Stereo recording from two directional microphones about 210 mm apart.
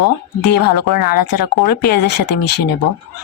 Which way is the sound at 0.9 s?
45° left (ahead or behind).